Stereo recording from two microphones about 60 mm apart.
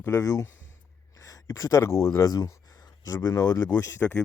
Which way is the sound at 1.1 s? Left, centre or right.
Left.